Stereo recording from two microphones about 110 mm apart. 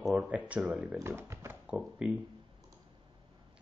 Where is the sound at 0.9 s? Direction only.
25° right (ahead or behind).